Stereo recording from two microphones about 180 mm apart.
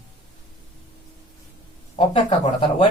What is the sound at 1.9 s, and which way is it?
Speech, 30° left (ahead or behind).